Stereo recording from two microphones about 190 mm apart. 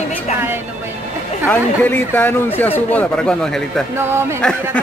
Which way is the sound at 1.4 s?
10° left (ahead or behind).